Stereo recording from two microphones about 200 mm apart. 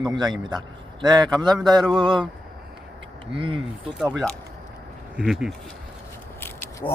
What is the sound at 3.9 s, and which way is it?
Speech, 5° right (ahead or behind).